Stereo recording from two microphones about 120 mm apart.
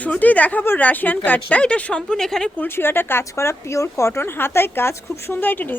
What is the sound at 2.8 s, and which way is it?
A woman's voice, 20° left (ahead or behind).